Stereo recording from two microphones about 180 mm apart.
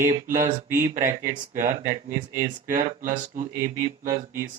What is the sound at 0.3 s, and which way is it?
Speech, 45° right (ahead or behind).